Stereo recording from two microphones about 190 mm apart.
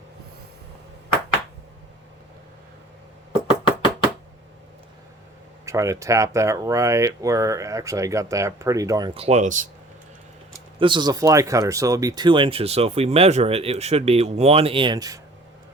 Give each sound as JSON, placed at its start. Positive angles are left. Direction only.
{"t": 5.6, "sound": "speech", "side_deg": -15}
{"t": 10.8, "sound": "speech", "side_deg": -25}